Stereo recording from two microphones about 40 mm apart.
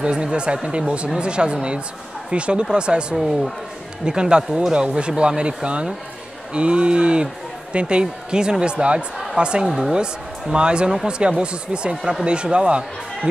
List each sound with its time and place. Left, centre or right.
0.0 s speech: right